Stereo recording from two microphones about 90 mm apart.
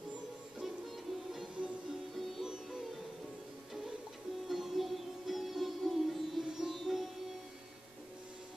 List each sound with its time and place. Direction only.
0.6 s music: centre (ahead or behind)
4.5 s sitar: 5° right (ahead or behind)